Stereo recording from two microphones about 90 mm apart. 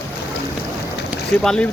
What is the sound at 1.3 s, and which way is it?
Speech, 10° left (ahead or behind).